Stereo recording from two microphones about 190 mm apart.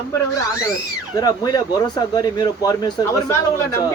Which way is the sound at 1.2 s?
20° left (ahead or behind).